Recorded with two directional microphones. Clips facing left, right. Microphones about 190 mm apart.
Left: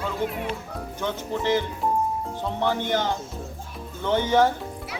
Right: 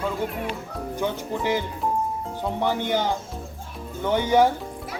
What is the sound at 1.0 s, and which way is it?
Speech, 10° right (ahead or behind).